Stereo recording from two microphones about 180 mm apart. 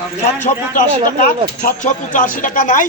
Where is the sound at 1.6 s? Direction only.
45° left (ahead or behind).